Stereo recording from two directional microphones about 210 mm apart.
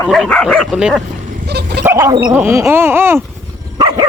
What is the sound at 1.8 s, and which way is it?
Speech, 15° right (ahead or behind).